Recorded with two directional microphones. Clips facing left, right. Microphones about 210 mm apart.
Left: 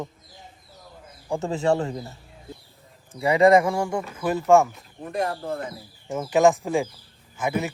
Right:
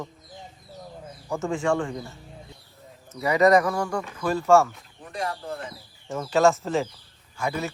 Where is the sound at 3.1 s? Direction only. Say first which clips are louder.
Left 2 dB; 30° left (ahead or behind).